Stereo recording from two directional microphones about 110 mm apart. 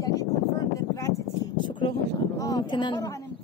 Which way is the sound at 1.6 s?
45° left (ahead or behind).